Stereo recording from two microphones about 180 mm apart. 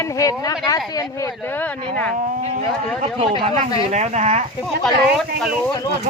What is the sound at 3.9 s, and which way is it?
Speech, 40° right (ahead or behind).